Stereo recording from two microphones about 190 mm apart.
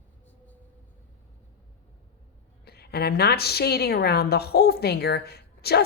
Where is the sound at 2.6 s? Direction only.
55° left (ahead or behind).